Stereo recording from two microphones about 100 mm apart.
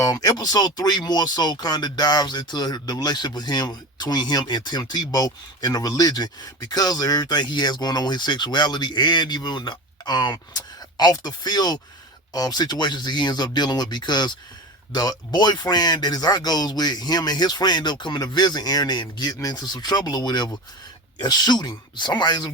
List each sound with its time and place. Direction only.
0.0 s speech: 40° left (ahead or behind)